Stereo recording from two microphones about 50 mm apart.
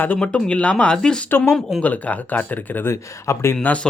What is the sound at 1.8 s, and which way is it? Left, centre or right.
Speech, left.